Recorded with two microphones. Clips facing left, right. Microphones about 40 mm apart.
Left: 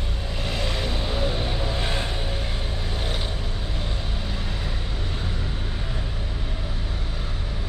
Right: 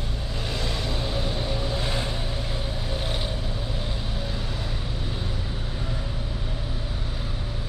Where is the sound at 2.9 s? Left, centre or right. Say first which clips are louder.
Even; centre.